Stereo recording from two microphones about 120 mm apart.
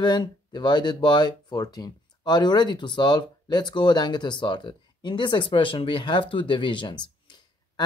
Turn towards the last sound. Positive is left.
turn(degrees=40)  # may be behind; listen again after turning